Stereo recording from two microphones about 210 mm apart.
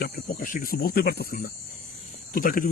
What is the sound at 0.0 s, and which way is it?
Speech, 45° left (ahead or behind).